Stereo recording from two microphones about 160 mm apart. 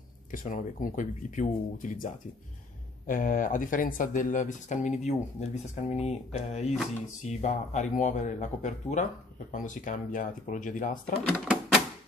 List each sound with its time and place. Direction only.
0.3 s speech: 60° left (ahead or behind)